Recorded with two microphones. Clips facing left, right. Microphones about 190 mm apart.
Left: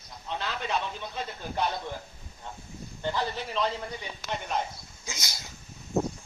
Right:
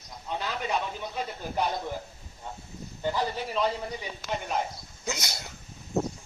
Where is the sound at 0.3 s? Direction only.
10° right (ahead or behind).